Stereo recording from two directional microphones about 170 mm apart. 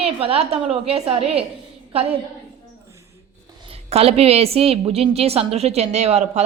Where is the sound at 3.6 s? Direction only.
35° right (ahead or behind).